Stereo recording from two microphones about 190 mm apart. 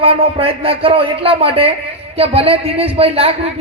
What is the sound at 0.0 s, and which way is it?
A man's voice, 30° right (ahead or behind).